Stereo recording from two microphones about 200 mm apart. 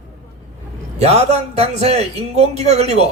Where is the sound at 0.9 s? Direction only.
30° right (ahead or behind).